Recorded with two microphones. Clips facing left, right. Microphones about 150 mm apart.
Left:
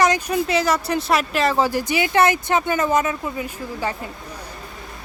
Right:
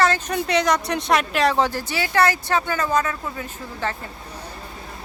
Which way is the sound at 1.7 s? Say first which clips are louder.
Left 5 dB; 15° left (ahead or behind).